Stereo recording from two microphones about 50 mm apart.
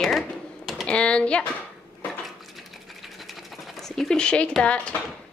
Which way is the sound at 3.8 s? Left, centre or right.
Centre.